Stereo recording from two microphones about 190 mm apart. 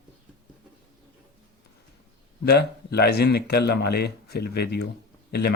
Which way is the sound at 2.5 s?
60° left (ahead or behind).